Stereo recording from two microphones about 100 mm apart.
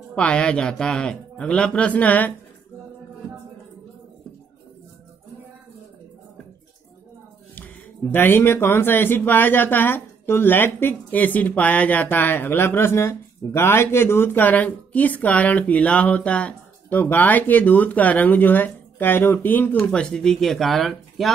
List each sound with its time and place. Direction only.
0.1 s a man's voice: 10° left (ahead or behind)
7.5 s speech: 20° left (ahead or behind); by 21.3 s centre (ahead or behind)